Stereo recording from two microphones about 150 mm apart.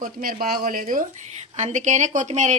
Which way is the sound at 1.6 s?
50° right (ahead or behind).